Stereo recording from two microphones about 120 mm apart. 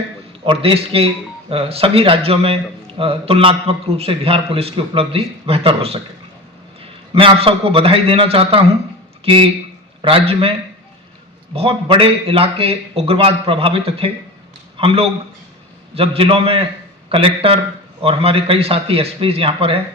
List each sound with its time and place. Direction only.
0.6 s a man's voice: 55° right (ahead or behind)
7.1 s a man's voice: 50° right (ahead or behind)
11.5 s a man's voice: 50° right (ahead or behind)